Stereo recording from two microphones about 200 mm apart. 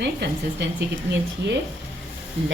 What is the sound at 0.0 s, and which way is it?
Speech, 60° right (ahead or behind).